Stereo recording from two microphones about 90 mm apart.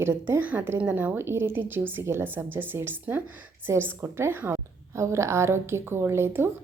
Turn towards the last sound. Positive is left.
turn(degrees=-25)  # may be behind; listen again after turning